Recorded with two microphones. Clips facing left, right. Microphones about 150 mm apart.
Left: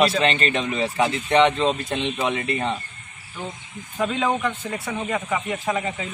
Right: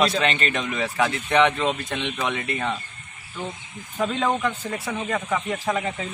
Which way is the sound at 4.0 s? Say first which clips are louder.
Left 1 dB; 5° left (ahead or behind).